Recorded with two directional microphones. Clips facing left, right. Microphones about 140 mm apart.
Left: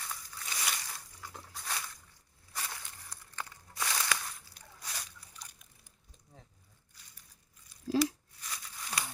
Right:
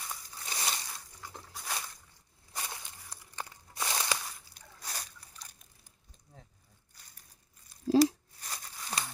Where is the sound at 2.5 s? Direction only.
20° right (ahead or behind).